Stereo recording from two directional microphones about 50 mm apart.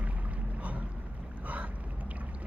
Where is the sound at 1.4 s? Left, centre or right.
Right.